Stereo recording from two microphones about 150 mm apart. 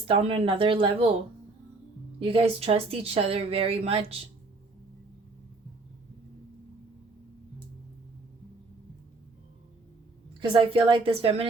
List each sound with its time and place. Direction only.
0.1 s speech: 40° right (ahead or behind)
2.1 s speech: 40° right (ahead or behind)
10.4 s speech: 35° right (ahead or behind)